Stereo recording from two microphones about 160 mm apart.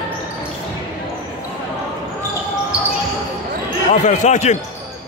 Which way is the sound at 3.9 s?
50° left (ahead or behind).